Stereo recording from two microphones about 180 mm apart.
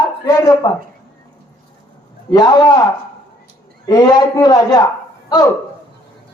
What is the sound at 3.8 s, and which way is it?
Speech, 20° left (ahead or behind).